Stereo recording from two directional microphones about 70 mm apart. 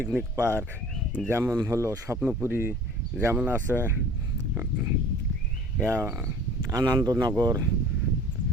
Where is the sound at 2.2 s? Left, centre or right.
Right.